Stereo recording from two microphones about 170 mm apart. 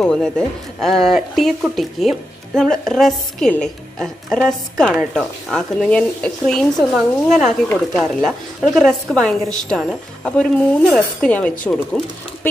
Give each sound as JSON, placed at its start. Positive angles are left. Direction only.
{"t": 0.0, "sound": "speech", "side_deg": 5}